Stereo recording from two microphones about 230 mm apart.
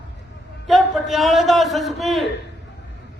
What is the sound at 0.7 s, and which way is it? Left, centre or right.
A man's voice, centre.